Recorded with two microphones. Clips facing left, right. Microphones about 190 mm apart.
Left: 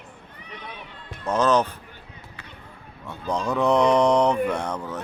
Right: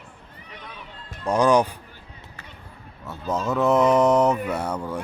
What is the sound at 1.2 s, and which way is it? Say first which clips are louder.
Speech: right 2 dB; 15° right (ahead or behind).